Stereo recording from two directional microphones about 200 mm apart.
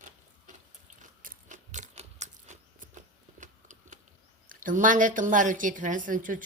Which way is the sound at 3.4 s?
40° right (ahead or behind).